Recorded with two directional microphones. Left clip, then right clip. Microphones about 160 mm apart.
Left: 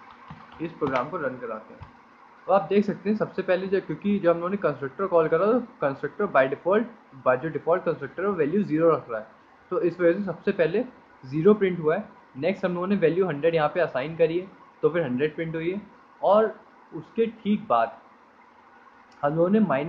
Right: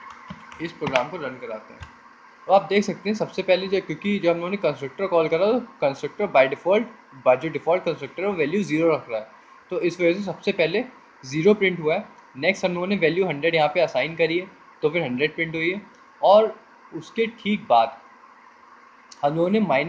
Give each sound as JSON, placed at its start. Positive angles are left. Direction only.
{"t": 0.6, "sound": "speech", "side_deg": -50}
{"t": 2.4, "sound": "speech", "side_deg": -45}
{"t": 19.2, "sound": "speech", "side_deg": -45}